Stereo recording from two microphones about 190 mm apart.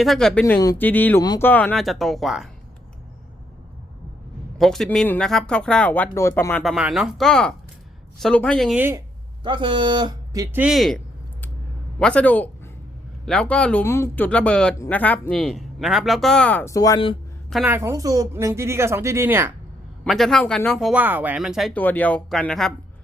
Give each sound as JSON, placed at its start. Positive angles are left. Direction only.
{"t": 0.0, "sound": "speech", "side_deg": 0}
{"t": 0.4, "sound": "speech", "side_deg": 15}
{"t": 1.2, "sound": "speech", "side_deg": 20}
{"t": 1.5, "sound": "speech", "side_deg": 10}
{"t": 4.5, "sound": "speech", "side_deg": 0}
{"t": 9.4, "sound": "speech", "side_deg": -25}
{"t": 17.7, "sound": "speech", "side_deg": -15}
{"t": 20.1, "sound": "speech", "side_deg": 0}